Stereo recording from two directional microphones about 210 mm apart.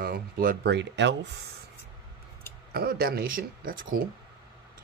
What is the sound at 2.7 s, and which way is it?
Speech, 45° right (ahead or behind).